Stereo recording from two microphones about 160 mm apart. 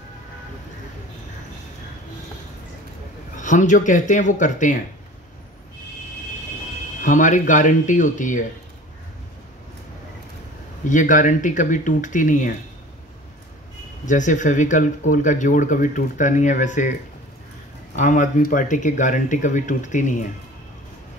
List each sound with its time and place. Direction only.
3.3 s speech: 50° left (ahead or behind)
7.0 s speech: 50° left (ahead or behind)
10.9 s speech: 55° left (ahead or behind)
14.0 s speech: 50° left (ahead or behind)
17.9 s speech: 50° left (ahead or behind)